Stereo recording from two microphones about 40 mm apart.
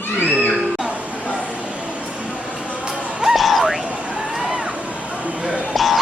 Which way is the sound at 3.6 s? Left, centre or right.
Right.